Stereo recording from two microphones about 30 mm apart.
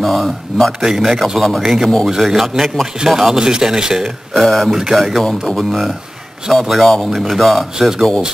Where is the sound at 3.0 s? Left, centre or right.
Right.